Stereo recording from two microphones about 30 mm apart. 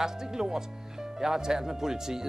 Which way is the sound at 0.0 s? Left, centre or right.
Centre.